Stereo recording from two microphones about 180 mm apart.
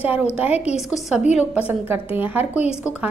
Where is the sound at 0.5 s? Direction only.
35° left (ahead or behind).